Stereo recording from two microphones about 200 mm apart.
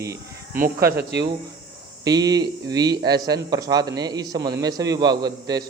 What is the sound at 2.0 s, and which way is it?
A man's voice, 20° right (ahead or behind).